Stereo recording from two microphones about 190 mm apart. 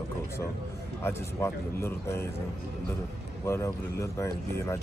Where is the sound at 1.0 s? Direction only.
15° left (ahead or behind).